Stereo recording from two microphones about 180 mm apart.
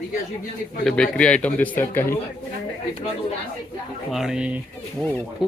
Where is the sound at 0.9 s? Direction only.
5° left (ahead or behind).